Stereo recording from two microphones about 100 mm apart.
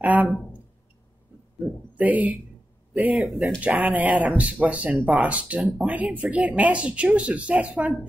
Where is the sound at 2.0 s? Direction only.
15° right (ahead or behind).